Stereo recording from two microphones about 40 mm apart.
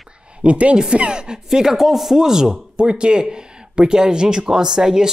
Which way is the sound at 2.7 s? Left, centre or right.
Right.